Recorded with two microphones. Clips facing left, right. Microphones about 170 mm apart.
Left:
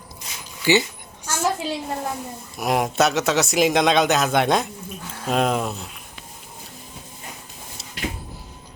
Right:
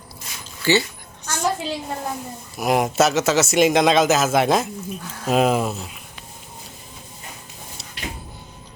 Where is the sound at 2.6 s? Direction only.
Centre (ahead or behind).